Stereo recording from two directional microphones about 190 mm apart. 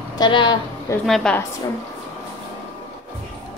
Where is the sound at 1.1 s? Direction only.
5° left (ahead or behind).